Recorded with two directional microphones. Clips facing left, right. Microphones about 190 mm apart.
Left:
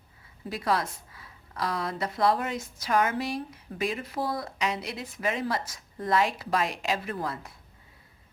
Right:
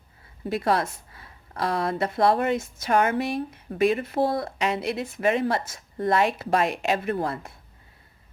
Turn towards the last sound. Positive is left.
turn(degrees=-55)  # may be behind; listen again after turning